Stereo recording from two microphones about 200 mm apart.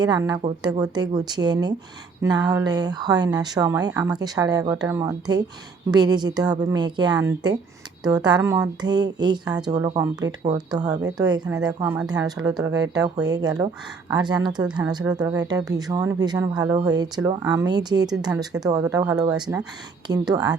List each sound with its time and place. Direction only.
0.0 s speech: 20° right (ahead or behind)